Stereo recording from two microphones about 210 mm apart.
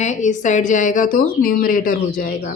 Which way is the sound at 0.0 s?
35° left (ahead or behind).